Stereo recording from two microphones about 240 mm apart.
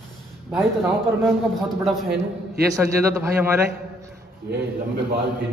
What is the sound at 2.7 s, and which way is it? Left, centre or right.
Speech, centre.